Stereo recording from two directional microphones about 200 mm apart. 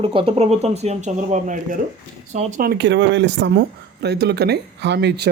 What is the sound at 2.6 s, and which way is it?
Speech, 55° right (ahead or behind).